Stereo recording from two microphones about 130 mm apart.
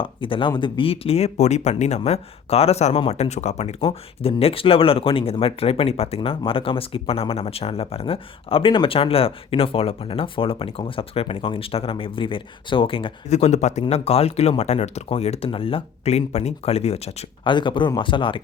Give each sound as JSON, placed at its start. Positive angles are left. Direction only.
{"t": 0.0, "sound": "speech", "side_deg": 40}
{"t": 13.3, "sound": "speech", "side_deg": 60}
{"t": 13.8, "sound": "speech", "side_deg": 50}
{"t": 17.4, "sound": "speech", "side_deg": 35}